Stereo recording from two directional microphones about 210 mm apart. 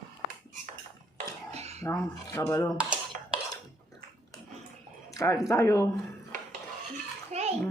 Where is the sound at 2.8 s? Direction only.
5° right (ahead or behind).